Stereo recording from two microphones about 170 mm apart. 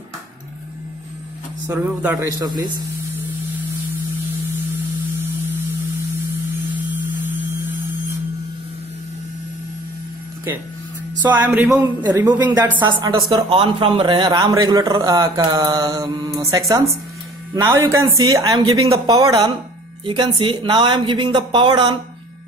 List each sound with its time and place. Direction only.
1.7 s speech: 20° right (ahead or behind)
11.3 s speech: 10° right (ahead or behind)
12.0 s speech: 25° right (ahead or behind)